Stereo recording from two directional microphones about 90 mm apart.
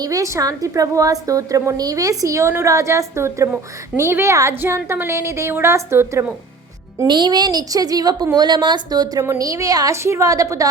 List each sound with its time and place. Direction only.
0.0 s a woman's voice: 40° right (ahead or behind)
7.1 s a woman's voice: 55° right (ahead or behind)
8.4 s a woman's voice: 55° right (ahead or behind); by 10.7 s 35° right (ahead or behind)